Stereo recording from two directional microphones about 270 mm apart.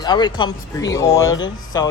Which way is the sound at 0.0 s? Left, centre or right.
Centre.